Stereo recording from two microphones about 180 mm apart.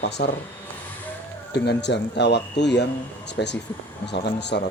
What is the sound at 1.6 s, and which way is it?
Speech, 70° left (ahead or behind).